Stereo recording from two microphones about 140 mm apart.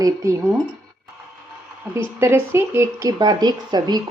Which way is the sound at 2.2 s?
15° right (ahead or behind).